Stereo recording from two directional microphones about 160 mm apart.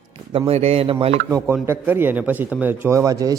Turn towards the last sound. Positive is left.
turn(degrees=-20)  # may be behind; listen again after turning